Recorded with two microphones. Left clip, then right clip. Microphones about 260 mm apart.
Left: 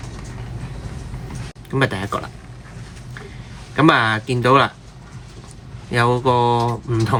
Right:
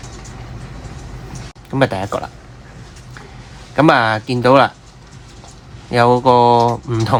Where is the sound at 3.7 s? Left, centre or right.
Right.